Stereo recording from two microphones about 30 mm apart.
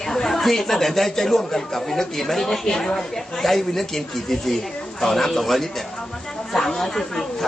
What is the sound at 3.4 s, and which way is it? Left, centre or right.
Speech, centre.